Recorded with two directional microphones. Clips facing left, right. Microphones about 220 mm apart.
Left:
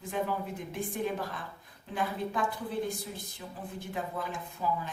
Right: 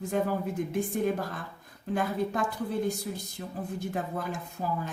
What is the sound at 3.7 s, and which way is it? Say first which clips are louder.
Speech: right 2 dB; 45° right (ahead or behind).